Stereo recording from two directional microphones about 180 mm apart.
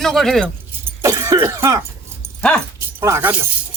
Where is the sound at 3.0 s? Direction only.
15° right (ahead or behind).